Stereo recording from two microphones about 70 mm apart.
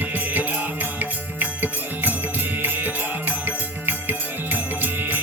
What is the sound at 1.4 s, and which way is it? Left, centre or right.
Music, right.